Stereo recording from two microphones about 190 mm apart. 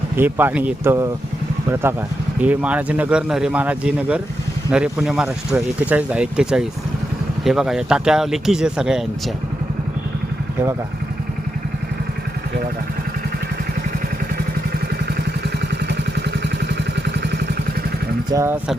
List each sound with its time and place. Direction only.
0.2 s a man's voice: 10° right (ahead or behind)
15.9 s vehicle: 60° right (ahead or behind)
18.3 s a man's voice: 15° right (ahead or behind)